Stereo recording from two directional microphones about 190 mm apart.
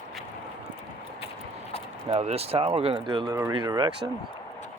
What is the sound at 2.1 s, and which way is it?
Speech, 35° right (ahead or behind).